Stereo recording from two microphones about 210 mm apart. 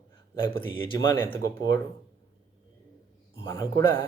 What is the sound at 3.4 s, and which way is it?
Speech, 20° left (ahead or behind).